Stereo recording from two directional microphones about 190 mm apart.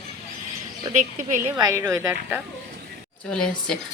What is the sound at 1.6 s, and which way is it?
Speech, 15° right (ahead or behind).